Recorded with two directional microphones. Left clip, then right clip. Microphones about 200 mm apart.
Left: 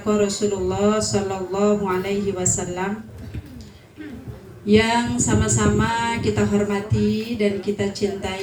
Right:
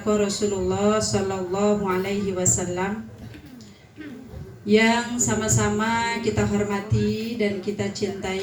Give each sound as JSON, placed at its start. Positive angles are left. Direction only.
{"t": 0.0, "sound": "a woman's voice", "side_deg": 25}
{"t": 4.6, "sound": "a woman's voice", "side_deg": 25}